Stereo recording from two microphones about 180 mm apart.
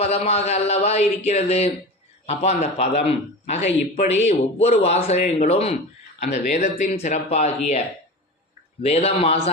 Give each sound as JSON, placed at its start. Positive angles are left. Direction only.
{"t": 0.0, "sound": "a man's voice", "side_deg": 35}
{"t": 8.8, "sound": "a man's voice", "side_deg": 35}